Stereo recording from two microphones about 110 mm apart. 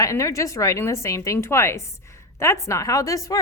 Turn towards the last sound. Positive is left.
turn(degrees=30)  # may be behind; listen again after turning